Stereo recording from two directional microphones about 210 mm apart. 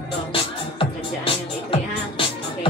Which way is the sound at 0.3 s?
25° left (ahead or behind).